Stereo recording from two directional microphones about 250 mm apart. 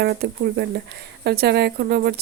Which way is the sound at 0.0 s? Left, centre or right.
Right.